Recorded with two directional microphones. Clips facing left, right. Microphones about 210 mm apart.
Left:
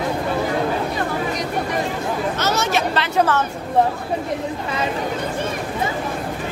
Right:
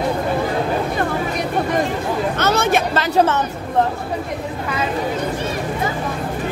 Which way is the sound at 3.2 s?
20° right (ahead or behind).